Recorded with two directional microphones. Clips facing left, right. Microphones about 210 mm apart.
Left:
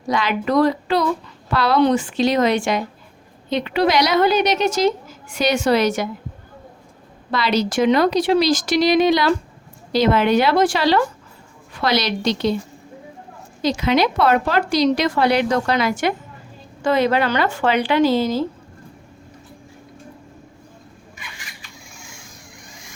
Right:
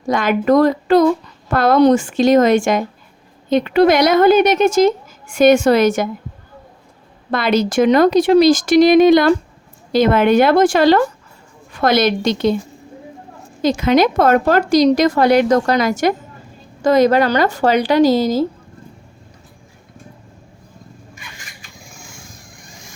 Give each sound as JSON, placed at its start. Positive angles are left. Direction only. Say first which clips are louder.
{"t": 0.1, "sound": "a woman's voice", "louder": "right 6 dB", "side_deg": -50}
{"t": 7.3, "sound": "a woman's voice", "louder": "right 4 dB", "side_deg": -50}
{"t": 13.6, "sound": "a woman's voice", "louder": "right 4 dB", "side_deg": -50}
{"t": 21.2, "sound": "a sound", "louder": "right 1 dB", "side_deg": -45}